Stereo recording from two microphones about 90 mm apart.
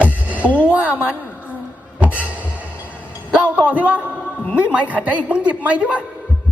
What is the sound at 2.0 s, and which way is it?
Music, 20° left (ahead or behind).